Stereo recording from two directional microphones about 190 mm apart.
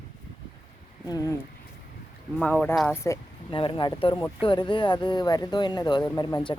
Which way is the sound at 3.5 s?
25° left (ahead or behind).